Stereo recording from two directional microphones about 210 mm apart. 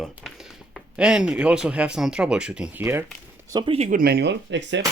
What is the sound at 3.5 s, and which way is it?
Speech, 25° right (ahead or behind).